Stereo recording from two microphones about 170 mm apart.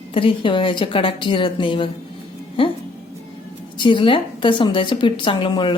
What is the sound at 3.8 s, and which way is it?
A woman's voice, 30° left (ahead or behind).